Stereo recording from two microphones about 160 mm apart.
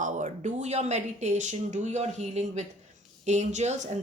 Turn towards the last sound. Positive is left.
turn(degrees=-50)  # may be behind; listen again after turning